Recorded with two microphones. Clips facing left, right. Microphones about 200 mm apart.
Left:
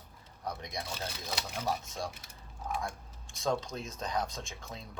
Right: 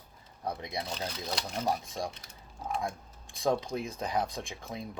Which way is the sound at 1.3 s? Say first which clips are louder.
Right 3 dB; 5° left (ahead or behind).